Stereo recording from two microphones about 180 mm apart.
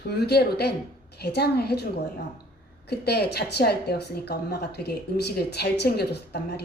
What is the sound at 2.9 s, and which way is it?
A woman's voice, 65° left (ahead or behind).